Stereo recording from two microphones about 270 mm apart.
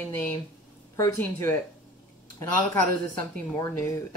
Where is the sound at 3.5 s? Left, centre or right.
Centre.